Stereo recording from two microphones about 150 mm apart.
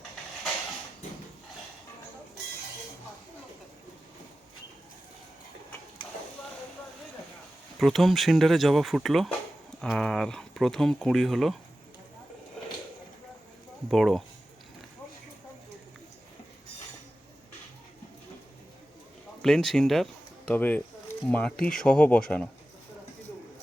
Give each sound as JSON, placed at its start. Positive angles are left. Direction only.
{"t": 7.8, "sound": "speech", "side_deg": 0}
{"t": 13.8, "sound": "speech", "side_deg": 0}
{"t": 19.4, "sound": "speech", "side_deg": 5}